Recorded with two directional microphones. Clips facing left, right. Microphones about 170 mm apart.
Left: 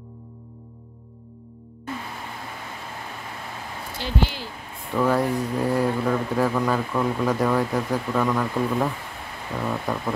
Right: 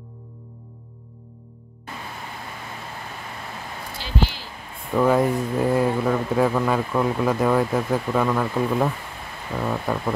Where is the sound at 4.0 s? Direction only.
55° left (ahead or behind).